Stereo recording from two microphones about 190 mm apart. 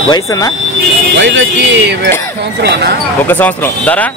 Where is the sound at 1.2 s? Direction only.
70° right (ahead or behind).